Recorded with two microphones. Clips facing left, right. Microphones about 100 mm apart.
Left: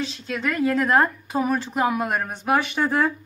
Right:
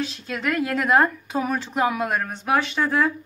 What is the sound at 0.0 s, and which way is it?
Speech, 5° right (ahead or behind).